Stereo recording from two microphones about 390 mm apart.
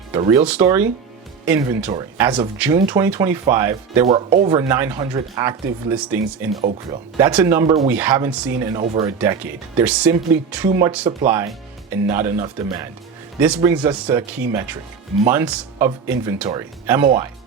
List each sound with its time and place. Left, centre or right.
0.1 s speech: centre